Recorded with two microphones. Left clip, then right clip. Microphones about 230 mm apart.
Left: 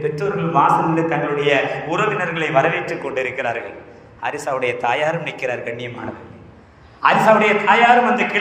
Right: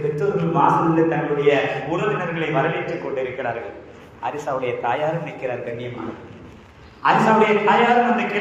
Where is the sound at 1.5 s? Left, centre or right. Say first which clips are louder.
Right 1 dB; left.